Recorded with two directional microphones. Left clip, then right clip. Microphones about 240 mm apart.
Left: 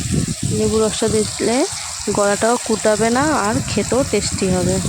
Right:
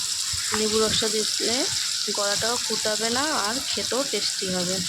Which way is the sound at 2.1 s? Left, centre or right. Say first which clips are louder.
Left 11 dB; left.